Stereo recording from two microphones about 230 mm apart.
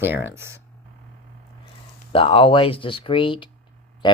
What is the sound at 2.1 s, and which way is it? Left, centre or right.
Speech, left.